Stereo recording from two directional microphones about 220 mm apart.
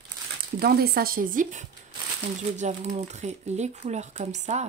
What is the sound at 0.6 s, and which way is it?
Speech, 45° right (ahead or behind).